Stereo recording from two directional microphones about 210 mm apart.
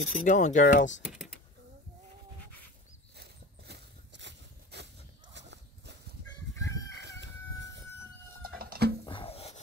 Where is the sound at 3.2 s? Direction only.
50° right (ahead or behind).